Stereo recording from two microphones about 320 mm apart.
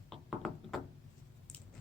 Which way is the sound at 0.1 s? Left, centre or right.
Centre.